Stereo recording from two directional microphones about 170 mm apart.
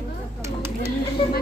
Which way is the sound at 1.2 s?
35° left (ahead or behind).